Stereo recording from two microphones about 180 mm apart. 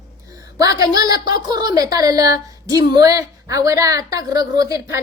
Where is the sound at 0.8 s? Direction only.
20° right (ahead or behind).